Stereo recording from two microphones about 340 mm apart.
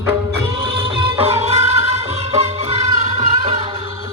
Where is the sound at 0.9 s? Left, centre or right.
Centre.